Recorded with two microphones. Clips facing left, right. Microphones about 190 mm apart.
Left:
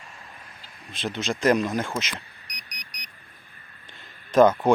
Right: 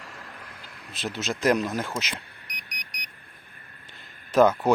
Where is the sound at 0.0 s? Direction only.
80° right.